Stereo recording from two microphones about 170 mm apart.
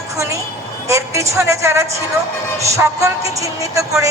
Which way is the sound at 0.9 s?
15° right (ahead or behind).